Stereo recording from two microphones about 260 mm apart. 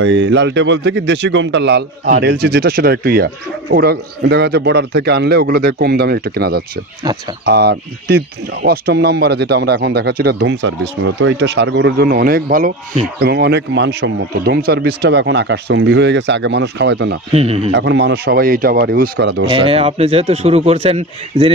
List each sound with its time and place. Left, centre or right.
0.0 s speech: right
17.3 s a man's voice: right
17.7 s speech: right
19.4 s a man's voice: right